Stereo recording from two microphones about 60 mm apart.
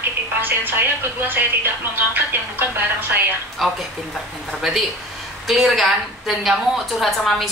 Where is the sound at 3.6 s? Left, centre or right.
Centre.